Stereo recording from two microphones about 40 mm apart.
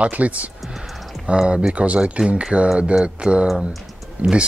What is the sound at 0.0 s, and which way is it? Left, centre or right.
Speech, right.